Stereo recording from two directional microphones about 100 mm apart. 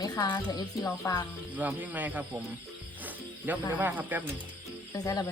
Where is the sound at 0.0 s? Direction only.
45° left (ahead or behind).